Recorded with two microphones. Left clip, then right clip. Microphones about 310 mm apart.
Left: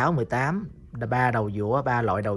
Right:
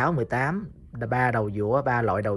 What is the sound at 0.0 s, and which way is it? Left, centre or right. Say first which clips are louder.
Speech: even; centre.